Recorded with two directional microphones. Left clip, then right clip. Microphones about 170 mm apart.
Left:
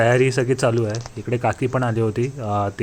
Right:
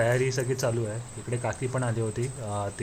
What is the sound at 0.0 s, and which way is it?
Speech, 35° left (ahead or behind).